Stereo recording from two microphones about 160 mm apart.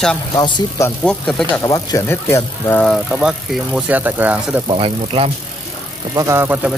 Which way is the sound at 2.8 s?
Centre (ahead or behind).